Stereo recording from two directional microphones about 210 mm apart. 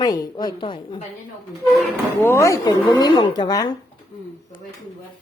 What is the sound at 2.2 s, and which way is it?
Speech, 15° left (ahead or behind).